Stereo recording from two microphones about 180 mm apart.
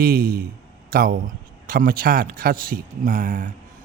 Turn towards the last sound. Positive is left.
turn(degrees=-50)  # may be behind; listen again after turning